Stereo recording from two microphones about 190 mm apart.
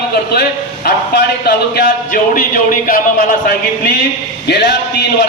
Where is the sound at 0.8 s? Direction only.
55° left (ahead or behind).